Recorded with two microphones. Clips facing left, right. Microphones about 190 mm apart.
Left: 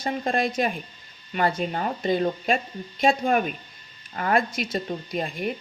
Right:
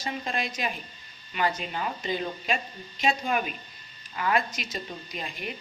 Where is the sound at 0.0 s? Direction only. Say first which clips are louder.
Left 7 dB; 50° left (ahead or behind).